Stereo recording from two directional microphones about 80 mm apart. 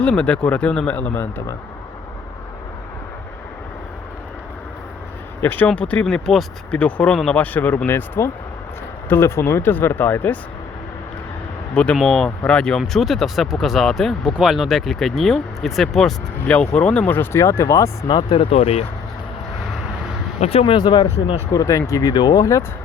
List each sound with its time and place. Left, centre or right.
0.0 s speech: centre
5.4 s speech: left
5.6 s speech: centre
11.7 s speech: centre
12.8 s speech: centre
16.7 s speech: centre
17.3 s speech: left
18.1 s speech: left
20.7 s speech: left
21.5 s speech: left